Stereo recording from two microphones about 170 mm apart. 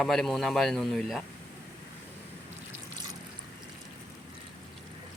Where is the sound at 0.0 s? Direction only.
Centre (ahead or behind).